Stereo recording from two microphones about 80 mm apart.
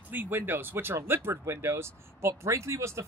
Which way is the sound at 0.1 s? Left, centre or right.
Right.